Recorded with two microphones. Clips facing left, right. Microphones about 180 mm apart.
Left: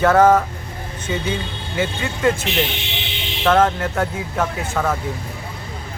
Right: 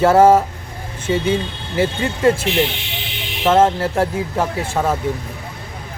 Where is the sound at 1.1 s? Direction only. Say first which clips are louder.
Right 6 dB; 30° right (ahead or behind).